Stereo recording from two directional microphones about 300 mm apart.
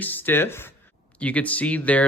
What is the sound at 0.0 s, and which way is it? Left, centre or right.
Speech, centre.